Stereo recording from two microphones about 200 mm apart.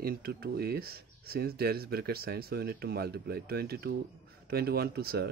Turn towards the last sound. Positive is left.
turn(degrees=-55)  # may be behind; listen again after turning